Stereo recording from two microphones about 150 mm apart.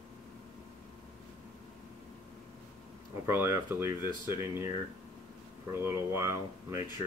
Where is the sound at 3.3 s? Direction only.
15° right (ahead or behind).